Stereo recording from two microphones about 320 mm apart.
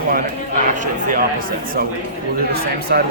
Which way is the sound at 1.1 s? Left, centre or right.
Right.